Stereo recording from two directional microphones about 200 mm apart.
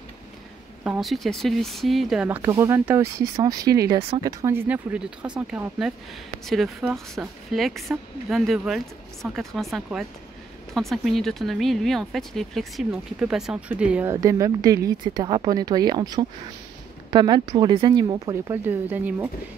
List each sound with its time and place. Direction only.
0.8 s speech: 5° right (ahead or behind)
14.2 s speech: 15° right (ahead or behind)